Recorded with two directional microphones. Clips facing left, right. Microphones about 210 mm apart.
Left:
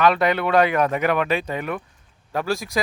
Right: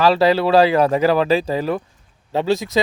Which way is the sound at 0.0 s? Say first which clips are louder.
Right 4 dB; 30° right (ahead or behind).